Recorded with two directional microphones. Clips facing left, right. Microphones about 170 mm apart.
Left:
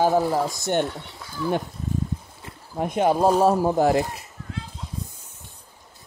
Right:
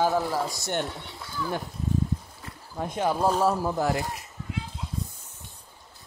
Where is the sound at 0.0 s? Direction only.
25° left (ahead or behind).